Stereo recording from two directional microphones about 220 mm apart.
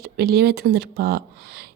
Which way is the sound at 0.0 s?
45° right (ahead or behind).